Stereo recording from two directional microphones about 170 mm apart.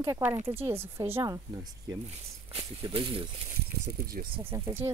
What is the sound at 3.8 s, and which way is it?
Speech, 60° right (ahead or behind).